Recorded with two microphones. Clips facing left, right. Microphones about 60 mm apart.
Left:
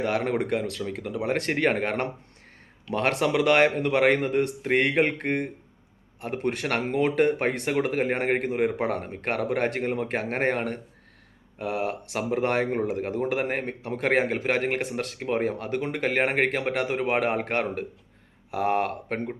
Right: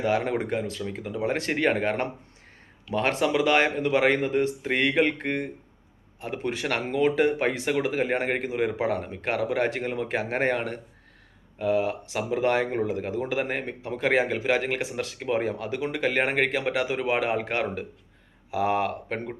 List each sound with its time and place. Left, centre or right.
0.0 s a man's voice: left
11.5 s a man's voice: left